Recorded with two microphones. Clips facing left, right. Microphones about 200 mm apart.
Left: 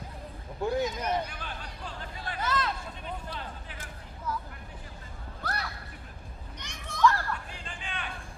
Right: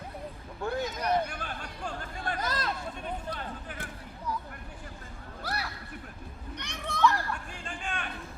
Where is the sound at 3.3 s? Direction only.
55° right (ahead or behind).